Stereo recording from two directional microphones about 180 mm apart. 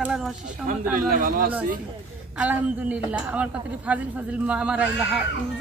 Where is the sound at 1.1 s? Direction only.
50° right (ahead or behind).